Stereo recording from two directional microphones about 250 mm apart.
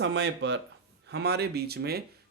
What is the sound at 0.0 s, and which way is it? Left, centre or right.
Speech, right.